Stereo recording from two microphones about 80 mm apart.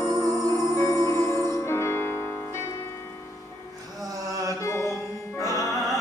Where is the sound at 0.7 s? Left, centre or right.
Left.